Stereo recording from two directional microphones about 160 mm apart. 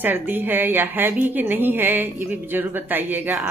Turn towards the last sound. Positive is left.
turn(degrees=-10)  # may be behind; listen again after turning